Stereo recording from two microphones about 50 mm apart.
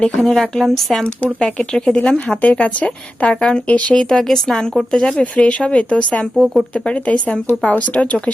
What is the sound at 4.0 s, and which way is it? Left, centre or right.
Speech, centre.